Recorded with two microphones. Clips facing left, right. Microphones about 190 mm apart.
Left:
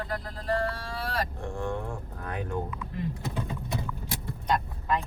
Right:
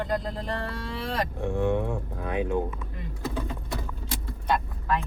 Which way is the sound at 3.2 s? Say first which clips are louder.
Right 2 dB; 20° left (ahead or behind).